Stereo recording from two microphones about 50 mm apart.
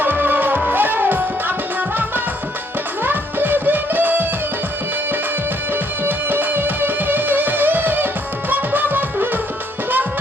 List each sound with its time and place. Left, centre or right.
0.0 s music: right
3.0 s music: right
5.7 s music: right